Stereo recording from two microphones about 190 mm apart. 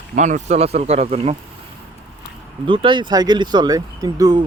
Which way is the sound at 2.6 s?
25° right (ahead or behind).